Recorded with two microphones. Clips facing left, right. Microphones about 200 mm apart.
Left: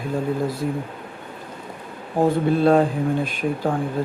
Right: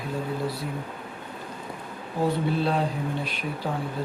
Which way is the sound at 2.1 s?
50° left (ahead or behind).